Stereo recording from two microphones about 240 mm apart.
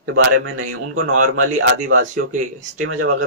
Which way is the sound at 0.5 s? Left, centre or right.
Right.